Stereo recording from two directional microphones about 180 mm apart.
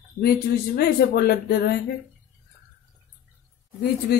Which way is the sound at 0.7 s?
60° left (ahead or behind).